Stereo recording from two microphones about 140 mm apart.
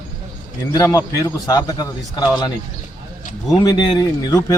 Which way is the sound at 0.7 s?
25° left (ahead or behind).